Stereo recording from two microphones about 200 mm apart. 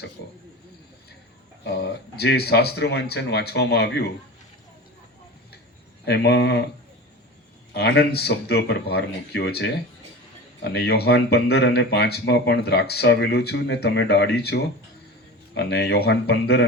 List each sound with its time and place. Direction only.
1.6 s speech: 55° left (ahead or behind)
6.1 s speech: 55° left (ahead or behind)
7.7 s speech: 55° left (ahead or behind)